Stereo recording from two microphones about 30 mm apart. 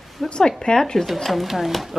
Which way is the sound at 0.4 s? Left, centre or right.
Left.